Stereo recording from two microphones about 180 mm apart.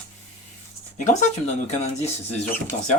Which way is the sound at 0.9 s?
40° left (ahead or behind).